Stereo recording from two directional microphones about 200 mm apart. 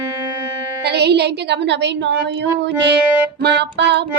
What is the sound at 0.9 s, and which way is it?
A woman's voice, 55° right (ahead or behind).